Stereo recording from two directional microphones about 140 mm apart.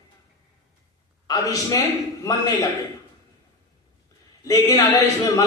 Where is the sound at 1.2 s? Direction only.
25° left (ahead or behind).